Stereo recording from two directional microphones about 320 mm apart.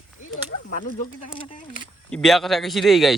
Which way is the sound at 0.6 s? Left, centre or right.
Left.